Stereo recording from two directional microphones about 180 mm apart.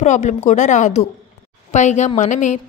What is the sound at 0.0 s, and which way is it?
A woman's voice, 40° left (ahead or behind).